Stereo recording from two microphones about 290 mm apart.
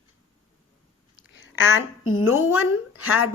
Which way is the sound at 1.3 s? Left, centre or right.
Left.